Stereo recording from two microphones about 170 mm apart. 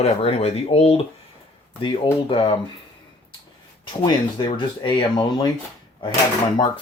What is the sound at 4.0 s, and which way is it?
Speech, 30° left (ahead or behind).